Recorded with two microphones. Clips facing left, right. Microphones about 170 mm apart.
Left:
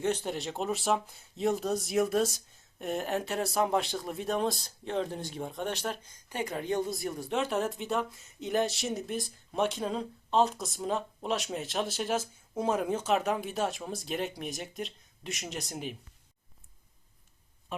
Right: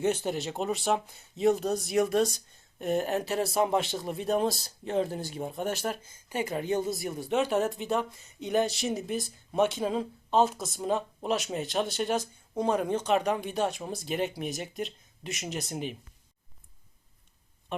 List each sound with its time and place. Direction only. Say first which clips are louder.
0.0 s speech: right 3 dB; 5° right (ahead or behind)